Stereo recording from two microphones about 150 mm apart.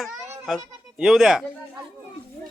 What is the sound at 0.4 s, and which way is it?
Speech, centre (ahead or behind).